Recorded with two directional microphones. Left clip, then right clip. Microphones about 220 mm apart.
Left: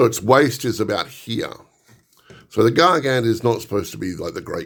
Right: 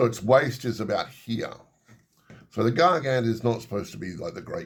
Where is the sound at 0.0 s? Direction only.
40° left (ahead or behind).